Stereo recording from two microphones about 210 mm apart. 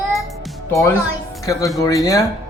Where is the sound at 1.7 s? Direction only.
15° left (ahead or behind).